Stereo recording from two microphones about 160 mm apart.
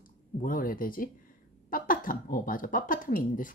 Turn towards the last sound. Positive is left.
turn(degrees=60)  # may be behind; listen again after turning